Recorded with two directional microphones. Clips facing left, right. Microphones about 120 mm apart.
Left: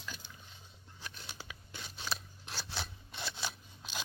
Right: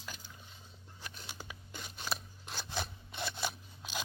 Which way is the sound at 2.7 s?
15° right (ahead or behind).